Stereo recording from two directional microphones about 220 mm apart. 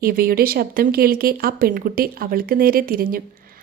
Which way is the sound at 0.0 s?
40° right (ahead or behind).